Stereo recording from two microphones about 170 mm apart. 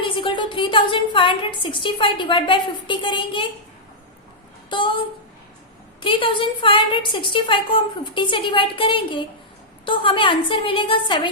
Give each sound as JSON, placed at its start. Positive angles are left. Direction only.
{"t": 0.0, "sound": "a woman's voice", "side_deg": 30}
{"t": 6.0, "sound": "a woman's voice", "side_deg": 30}